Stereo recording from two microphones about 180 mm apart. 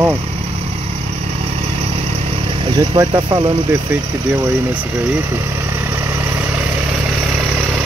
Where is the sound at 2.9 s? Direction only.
25° right (ahead or behind).